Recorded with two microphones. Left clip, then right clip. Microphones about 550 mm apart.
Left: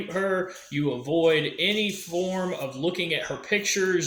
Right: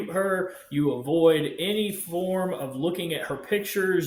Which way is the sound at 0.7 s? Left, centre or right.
Right.